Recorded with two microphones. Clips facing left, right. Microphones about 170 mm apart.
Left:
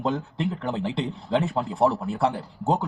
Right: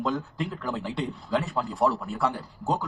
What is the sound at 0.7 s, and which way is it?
A man's voice, 25° left (ahead or behind).